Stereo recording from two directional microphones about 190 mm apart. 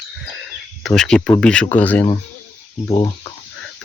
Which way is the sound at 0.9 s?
5° left (ahead or behind).